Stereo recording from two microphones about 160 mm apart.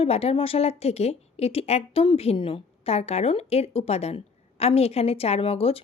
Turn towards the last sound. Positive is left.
turn(degrees=40)  # may be behind; listen again after turning